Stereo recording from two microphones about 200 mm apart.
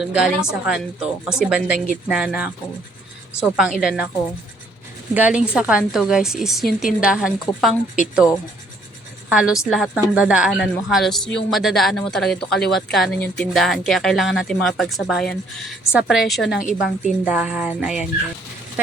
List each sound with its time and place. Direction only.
0.0 s speech: 5° right (ahead or behind)
3.5 s speech: 5° right (ahead or behind)
5.1 s a woman's voice: 5° right (ahead or behind)